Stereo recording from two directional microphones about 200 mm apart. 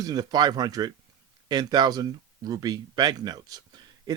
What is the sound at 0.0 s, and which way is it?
Speech, 20° right (ahead or behind).